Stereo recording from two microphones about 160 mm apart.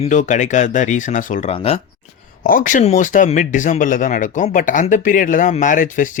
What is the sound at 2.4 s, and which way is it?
Speech, 60° left (ahead or behind).